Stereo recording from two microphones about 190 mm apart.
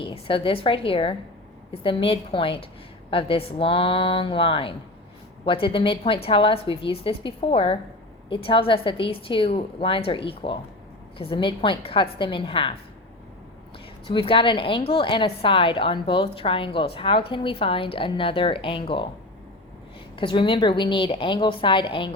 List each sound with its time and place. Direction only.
0.0 s a woman's voice: 30° left (ahead or behind)
14.1 s a woman's voice: 25° left (ahead or behind)
20.1 s a woman's voice: 25° left (ahead or behind)